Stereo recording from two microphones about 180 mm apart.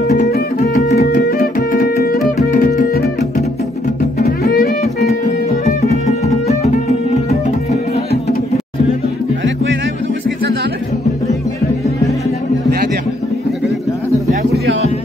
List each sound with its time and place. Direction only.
0.3 s music: 60° left (ahead or behind)
2.3 s music: 45° left (ahead or behind)
4.2 s music: 60° left (ahead or behind)
5.2 s music: 45° left (ahead or behind)